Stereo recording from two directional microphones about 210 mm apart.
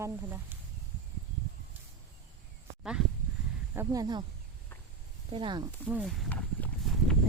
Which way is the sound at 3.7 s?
15° right (ahead or behind).